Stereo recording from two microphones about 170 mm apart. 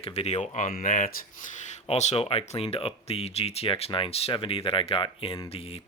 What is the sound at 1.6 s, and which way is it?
Speech, 40° left (ahead or behind).